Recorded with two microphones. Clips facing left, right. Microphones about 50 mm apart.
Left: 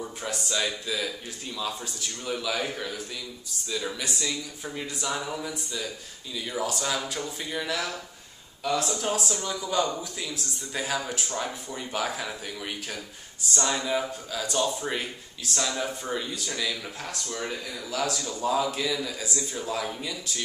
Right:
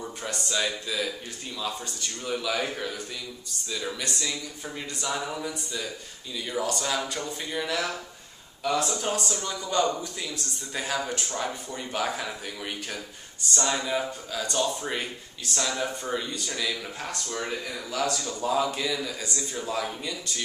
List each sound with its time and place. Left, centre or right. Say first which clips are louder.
0.0 s speech: left 1 dB; centre